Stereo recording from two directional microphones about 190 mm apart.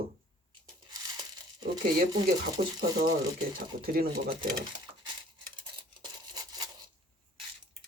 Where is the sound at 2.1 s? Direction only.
20° right (ahead or behind).